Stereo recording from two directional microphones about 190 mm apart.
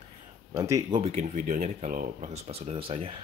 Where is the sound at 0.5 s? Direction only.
15° right (ahead or behind).